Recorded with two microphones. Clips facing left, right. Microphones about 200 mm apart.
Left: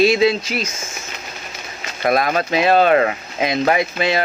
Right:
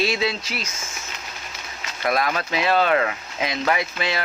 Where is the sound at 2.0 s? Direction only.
45° left (ahead or behind).